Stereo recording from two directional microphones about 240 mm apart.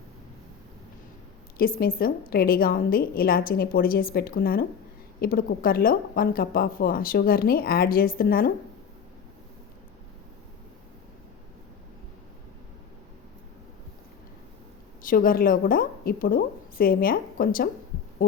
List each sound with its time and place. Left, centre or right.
1.5 s speech: left
15.0 s speech: left